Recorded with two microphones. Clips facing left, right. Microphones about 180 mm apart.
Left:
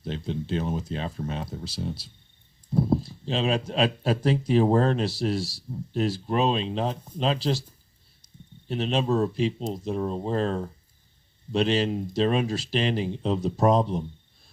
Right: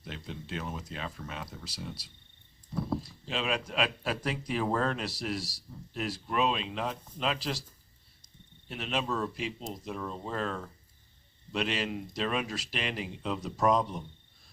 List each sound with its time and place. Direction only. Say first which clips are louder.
0.0 s speech: left 11 dB; 30° left (ahead or behind)
8.6 s speech: left 8 dB; 30° left (ahead or behind)